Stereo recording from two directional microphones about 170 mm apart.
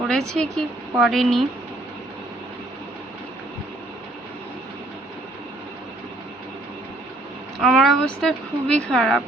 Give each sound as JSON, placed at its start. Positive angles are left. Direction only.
{"t": 0.1, "sound": "speech", "side_deg": 5}
{"t": 7.6, "sound": "speech", "side_deg": 0}